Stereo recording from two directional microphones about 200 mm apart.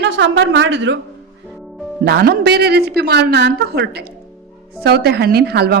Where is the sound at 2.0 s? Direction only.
50° right (ahead or behind).